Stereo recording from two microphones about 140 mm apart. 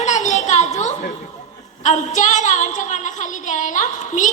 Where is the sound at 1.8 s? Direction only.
60° left (ahead or behind).